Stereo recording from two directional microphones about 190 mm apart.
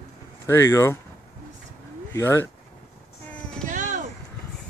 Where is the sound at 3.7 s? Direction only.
40° right (ahead or behind).